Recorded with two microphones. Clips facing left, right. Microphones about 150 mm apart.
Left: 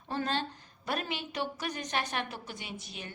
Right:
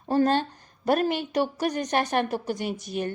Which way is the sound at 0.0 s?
40° right (ahead or behind).